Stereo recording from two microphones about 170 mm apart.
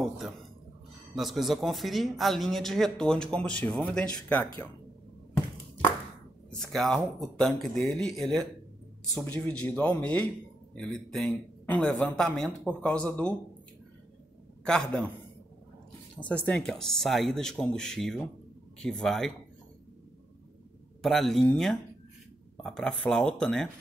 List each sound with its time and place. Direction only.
1.1 s a man's voice: centre (ahead or behind)
6.6 s a man's voice: centre (ahead or behind)
9.5 s a man's voice: 10° left (ahead or behind)
14.7 s a man's voice: 5° left (ahead or behind)
16.2 s a man's voice: 5° left (ahead or behind)
21.0 s a man's voice: centre (ahead or behind)